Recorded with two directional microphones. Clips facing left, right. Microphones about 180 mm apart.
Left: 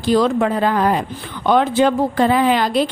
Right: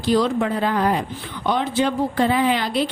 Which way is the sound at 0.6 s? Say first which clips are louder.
Left 3 dB; 50° left (ahead or behind).